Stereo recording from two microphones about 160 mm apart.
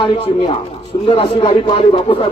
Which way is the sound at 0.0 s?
35° left (ahead or behind).